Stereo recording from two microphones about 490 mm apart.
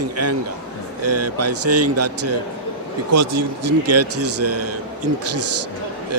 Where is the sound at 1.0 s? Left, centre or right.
Right.